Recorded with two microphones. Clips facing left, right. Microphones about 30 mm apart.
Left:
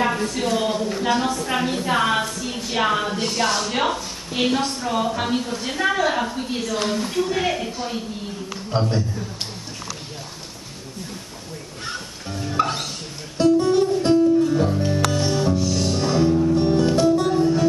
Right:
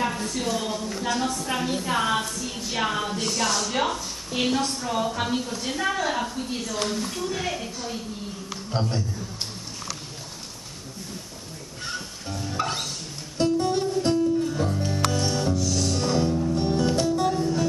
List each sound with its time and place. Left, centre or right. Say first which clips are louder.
0.0 s a woman's voice: left 5 dB; left
11.8 s music: left 1 dB; left